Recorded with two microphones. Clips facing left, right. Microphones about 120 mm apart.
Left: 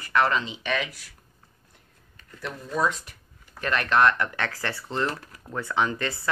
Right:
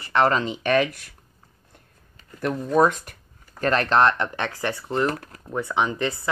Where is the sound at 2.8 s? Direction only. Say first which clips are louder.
Right 7 dB; 50° right (ahead or behind).